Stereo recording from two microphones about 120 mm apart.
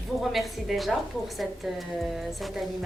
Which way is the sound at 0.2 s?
Centre (ahead or behind).